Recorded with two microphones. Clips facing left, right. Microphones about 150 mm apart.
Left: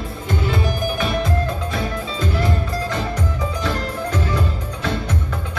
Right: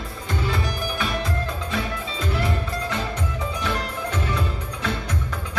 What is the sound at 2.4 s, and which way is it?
Music, 30° left (ahead or behind).